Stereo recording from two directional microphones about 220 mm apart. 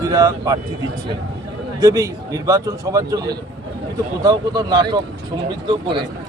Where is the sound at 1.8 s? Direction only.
15° right (ahead or behind).